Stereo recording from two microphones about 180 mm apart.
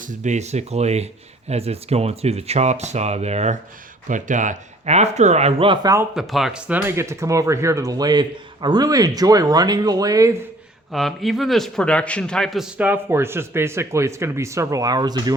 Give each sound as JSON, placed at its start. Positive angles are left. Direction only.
{"t": 0.0, "sound": "speech", "side_deg": -40}
{"t": 6.1, "sound": "speech", "side_deg": 0}
{"t": 10.9, "sound": "a man's voice", "side_deg": 0}